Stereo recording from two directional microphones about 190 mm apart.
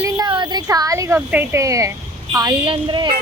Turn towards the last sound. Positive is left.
turn(degrees=-25)  # may be behind; listen again after turning